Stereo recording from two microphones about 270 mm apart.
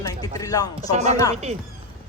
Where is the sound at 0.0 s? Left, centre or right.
Centre.